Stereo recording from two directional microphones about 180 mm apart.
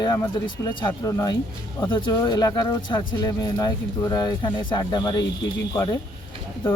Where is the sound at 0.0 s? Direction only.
20° left (ahead or behind).